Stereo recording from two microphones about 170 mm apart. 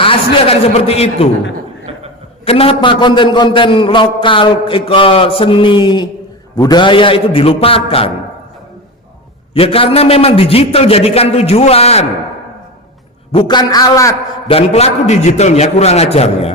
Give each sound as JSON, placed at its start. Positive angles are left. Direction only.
{"t": 0.0, "sound": "a man's voice", "side_deg": 35}
{"t": 2.4, "sound": "a man's voice", "side_deg": 35}
{"t": 9.6, "sound": "a man's voice", "side_deg": 35}
{"t": 13.3, "sound": "a man's voice", "side_deg": 25}
{"t": 14.4, "sound": "a man's voice", "side_deg": 35}